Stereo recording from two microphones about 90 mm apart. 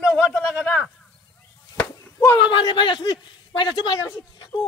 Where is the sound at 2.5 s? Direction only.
65° left (ahead or behind).